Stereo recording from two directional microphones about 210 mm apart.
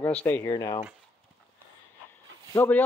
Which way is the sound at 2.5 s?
10° left (ahead or behind).